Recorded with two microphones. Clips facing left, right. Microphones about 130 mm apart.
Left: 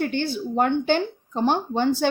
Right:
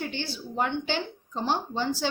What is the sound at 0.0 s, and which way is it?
Speech, 55° left (ahead or behind).